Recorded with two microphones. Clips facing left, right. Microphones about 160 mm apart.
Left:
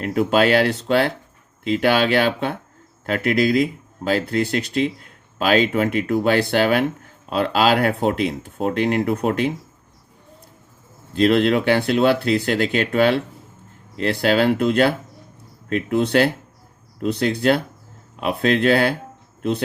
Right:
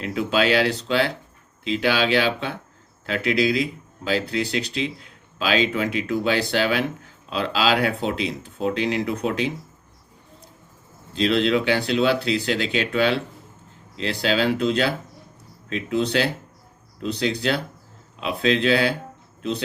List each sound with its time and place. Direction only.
0.0 s speech: 50° left (ahead or behind)
11.1 s speech: 50° left (ahead or behind)